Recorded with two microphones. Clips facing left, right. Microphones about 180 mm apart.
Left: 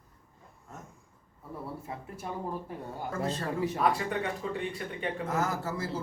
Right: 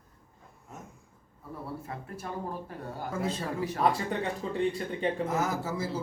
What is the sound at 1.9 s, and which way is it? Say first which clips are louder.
Speech: even; 20° left (ahead or behind).